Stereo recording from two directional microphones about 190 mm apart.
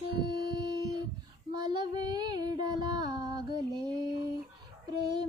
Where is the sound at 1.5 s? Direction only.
20° right (ahead or behind).